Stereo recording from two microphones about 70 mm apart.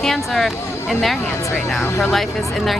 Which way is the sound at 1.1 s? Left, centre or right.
Left.